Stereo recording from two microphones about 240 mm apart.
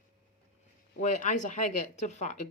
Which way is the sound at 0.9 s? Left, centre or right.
Left.